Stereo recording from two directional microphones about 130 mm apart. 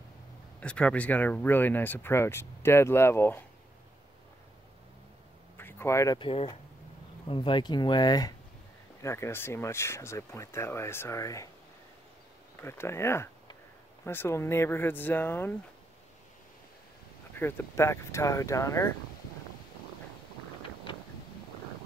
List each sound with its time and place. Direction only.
0.6 s speech: 10° left (ahead or behind)
5.6 s a sound: 15° left (ahead or behind)
6.1 s speech: 40° left (ahead or behind)
9.0 s speech: 20° left (ahead or behind)
12.6 s speech: 20° left (ahead or behind)
17.4 s speech: 15° left (ahead or behind)